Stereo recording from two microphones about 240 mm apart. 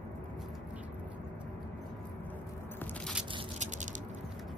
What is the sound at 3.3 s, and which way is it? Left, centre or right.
Patter, right.